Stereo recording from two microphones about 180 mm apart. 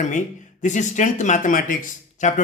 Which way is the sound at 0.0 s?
45° left (ahead or behind).